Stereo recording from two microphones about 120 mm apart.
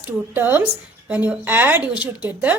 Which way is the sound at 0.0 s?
15° right (ahead or behind).